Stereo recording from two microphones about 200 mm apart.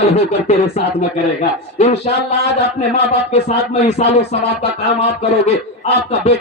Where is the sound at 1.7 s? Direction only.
30° left (ahead or behind).